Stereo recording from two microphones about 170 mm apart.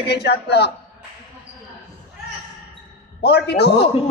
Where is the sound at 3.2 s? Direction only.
75° left (ahead or behind).